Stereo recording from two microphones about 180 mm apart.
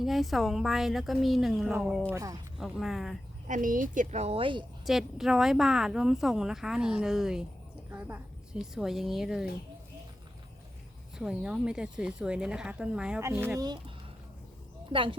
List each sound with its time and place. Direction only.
0.0 s speech: centre (ahead or behind)
2.1 s speech: 20° right (ahead or behind)
2.6 s speech: centre (ahead or behind)
3.4 s a woman's voice: 45° right (ahead or behind); by 4.6 s 30° right (ahead or behind)
4.9 s a woman's voice: centre (ahead or behind)
11.2 s speech: 5° right (ahead or behind)
13.6 s speech: 25° right (ahead or behind)